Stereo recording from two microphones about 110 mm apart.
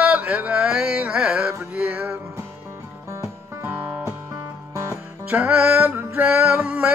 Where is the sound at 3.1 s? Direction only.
25° right (ahead or behind).